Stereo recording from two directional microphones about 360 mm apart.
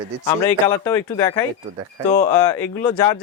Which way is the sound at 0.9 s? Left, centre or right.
Centre.